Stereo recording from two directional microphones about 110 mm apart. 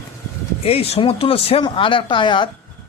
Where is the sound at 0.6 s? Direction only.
65° left (ahead or behind); by 2.5 s 45° left (ahead or behind).